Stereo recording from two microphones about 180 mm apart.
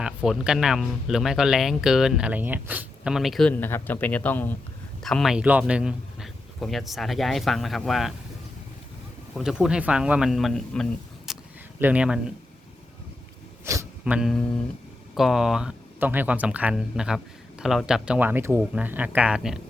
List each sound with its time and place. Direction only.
0.0 s speech: 5° right (ahead or behind)
9.3 s speech: 5° right (ahead or behind)
11.3 s a sound: centre (ahead or behind)
11.8 s speech: 5° right (ahead or behind)
14.0 s speech: 5° right (ahead or behind)